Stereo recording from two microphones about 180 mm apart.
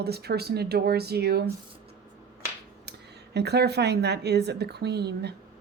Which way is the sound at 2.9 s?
65° right (ahead or behind).